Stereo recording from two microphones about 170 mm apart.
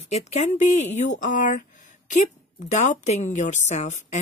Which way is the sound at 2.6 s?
45° left (ahead or behind).